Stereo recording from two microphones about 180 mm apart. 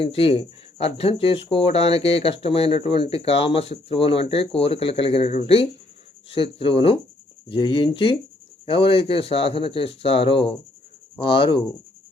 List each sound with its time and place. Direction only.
0.0 s speech: 30° left (ahead or behind)